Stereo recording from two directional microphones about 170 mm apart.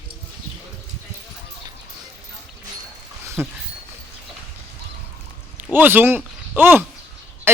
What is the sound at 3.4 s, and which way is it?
Speech, 10° right (ahead or behind).